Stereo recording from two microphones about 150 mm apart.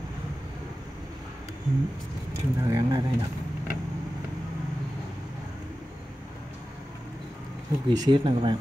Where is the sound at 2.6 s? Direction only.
20° right (ahead or behind).